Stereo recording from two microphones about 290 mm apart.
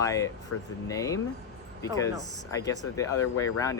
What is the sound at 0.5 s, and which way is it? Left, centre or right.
Speech, left.